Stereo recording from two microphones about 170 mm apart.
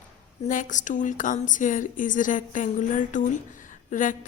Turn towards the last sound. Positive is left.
turn(degrees=50)  # may be behind; listen again after turning